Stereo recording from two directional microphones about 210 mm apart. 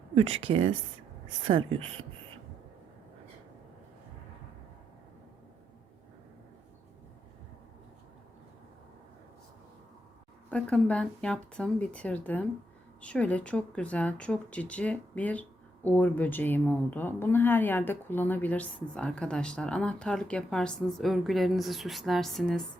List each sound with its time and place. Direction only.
0.1 s speech: 30° right (ahead or behind)
10.5 s speech: 5° left (ahead or behind)